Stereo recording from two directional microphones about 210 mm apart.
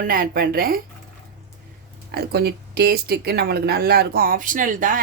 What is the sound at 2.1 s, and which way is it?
Speech, 50° right (ahead or behind).